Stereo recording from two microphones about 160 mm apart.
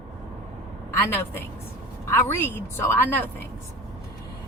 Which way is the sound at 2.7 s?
15° left (ahead or behind).